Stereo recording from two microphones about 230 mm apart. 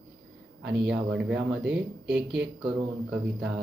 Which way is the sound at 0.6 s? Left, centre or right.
Right.